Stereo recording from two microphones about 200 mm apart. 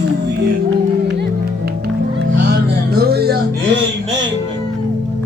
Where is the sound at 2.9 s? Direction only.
50° right (ahead or behind).